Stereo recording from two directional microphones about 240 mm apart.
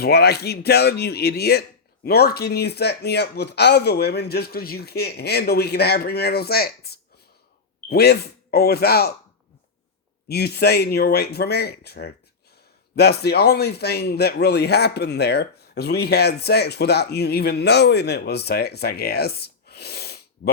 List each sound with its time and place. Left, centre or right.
0.0 s speech: left
10.2 s a man's voice: left